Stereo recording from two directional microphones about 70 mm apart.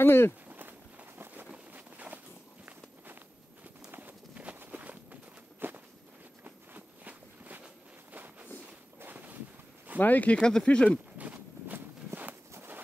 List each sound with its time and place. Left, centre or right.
0.0 s speech: left
0.5 s run: right
3.9 s clip-clop: right
4.6 s walk: right
8.1 s a sound: right
9.0 s boat: right
9.9 s speech: left
11.1 s walk: right
12.5 s a sound: right